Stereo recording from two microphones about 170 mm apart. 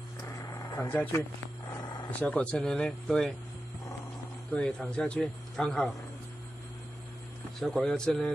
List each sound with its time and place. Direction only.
0.2 s vehicle: 20° left (ahead or behind)
2.1 s speech: 10° left (ahead or behind)
4.5 s speech: 5° left (ahead or behind)
7.6 s speech: centre (ahead or behind)